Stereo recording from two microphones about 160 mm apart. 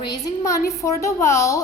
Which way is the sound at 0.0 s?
25° left (ahead or behind).